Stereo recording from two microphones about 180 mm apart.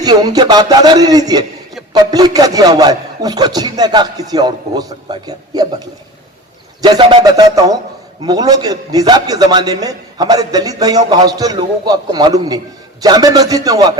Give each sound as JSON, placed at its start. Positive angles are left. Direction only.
{"t": 0.0, "sound": "a man's voice", "side_deg": -20}